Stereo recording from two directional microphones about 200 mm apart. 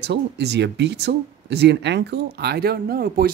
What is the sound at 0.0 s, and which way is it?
Speech, 55° right (ahead or behind).